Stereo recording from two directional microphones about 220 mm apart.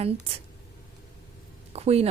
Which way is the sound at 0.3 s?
25° right (ahead or behind).